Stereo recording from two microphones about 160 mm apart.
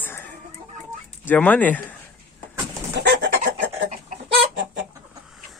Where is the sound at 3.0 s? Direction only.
70° right (ahead or behind).